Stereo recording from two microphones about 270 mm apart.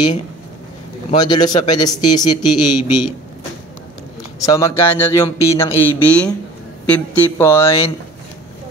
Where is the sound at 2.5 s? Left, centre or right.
Left.